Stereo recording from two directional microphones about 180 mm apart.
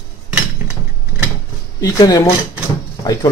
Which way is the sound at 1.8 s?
20° left (ahead or behind).